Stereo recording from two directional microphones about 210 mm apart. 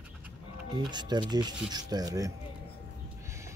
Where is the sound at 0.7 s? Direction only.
20° right (ahead or behind).